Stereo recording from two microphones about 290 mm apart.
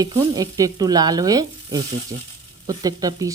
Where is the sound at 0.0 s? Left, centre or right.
Centre.